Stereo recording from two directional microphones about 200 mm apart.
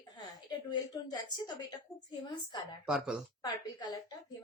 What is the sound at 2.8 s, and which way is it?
Speech, 5° right (ahead or behind).